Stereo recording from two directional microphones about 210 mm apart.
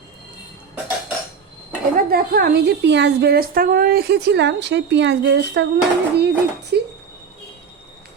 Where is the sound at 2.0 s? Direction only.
45° right (ahead or behind).